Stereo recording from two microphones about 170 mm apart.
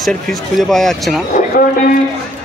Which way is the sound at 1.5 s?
55° left (ahead or behind).